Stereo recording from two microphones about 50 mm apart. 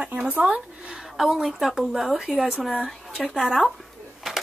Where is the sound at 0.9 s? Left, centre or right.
Centre.